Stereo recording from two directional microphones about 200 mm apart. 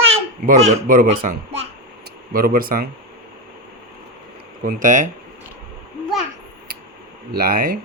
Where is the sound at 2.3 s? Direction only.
45° right (ahead or behind).